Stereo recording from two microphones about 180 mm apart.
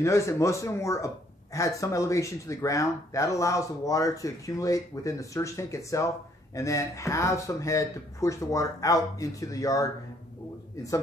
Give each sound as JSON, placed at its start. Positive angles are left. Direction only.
{"t": 0.0, "sound": "speech", "side_deg": 15}